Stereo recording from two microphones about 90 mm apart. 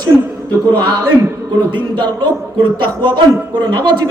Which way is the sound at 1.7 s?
60° right (ahead or behind).